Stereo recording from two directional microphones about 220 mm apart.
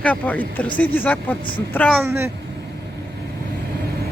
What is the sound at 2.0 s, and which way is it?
Speech, 10° right (ahead or behind).